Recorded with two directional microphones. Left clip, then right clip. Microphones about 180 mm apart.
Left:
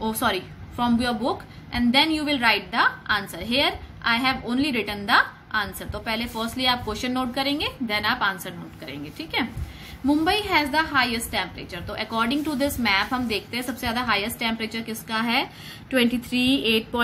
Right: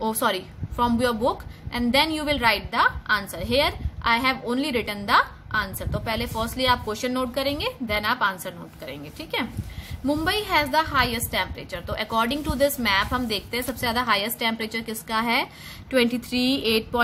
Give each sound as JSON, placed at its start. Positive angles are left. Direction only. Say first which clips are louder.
{"t": 0.0, "sound": "a woman's voice", "louder": "right 1 dB", "side_deg": -35}